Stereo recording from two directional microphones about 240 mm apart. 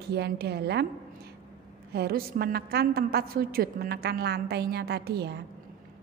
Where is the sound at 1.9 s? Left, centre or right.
Right.